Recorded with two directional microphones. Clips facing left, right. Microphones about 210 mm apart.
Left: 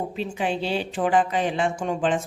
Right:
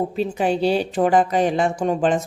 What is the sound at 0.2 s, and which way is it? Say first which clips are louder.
A woman's voice: right 6 dB; 40° right (ahead or behind).